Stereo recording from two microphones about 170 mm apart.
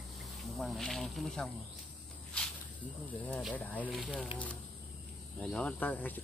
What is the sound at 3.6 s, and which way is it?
Speech, 5° left (ahead or behind).